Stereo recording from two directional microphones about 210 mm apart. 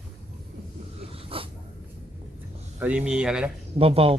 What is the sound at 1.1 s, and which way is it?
Dog, 25° right (ahead or behind).